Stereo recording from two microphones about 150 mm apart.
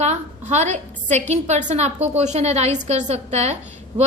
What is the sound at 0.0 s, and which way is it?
A woman's voice, 50° right (ahead or behind).